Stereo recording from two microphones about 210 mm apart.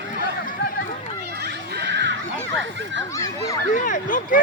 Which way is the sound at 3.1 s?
15° left (ahead or behind).